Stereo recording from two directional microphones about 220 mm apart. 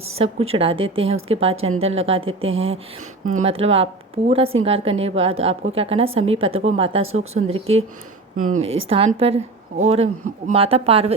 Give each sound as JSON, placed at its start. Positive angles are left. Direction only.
{"t": 0.2, "sound": "a woman's voice", "side_deg": -25}
{"t": 2.5, "sound": "speech", "side_deg": -60}
{"t": 3.3, "sound": "a woman's voice", "side_deg": -25}